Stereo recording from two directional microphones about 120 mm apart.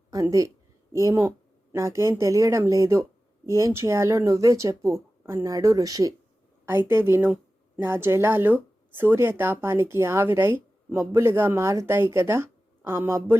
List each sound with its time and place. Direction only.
0.1 s speech: 30° right (ahead or behind)
6.7 s speech: 20° right (ahead or behind)